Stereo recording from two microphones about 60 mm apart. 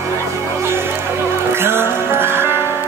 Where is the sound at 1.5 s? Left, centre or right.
Right.